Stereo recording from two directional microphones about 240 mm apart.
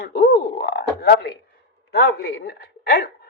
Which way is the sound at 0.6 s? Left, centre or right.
Left.